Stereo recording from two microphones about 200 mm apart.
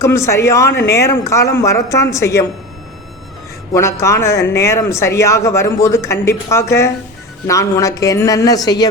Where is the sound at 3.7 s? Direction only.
15° left (ahead or behind).